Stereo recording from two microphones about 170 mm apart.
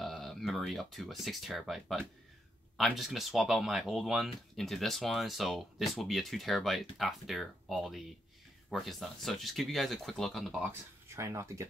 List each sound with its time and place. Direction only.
0.0 s a sound: centre (ahead or behind)
1.2 s speech: centre (ahead or behind)
10.6 s speech: 15° right (ahead or behind)